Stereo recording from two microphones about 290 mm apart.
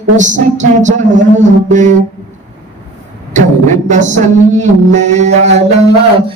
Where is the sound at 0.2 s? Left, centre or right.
Right.